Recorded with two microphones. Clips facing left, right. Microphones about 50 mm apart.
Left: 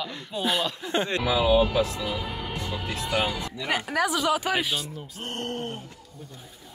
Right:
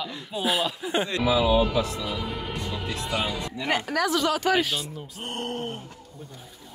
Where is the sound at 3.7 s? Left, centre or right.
Centre.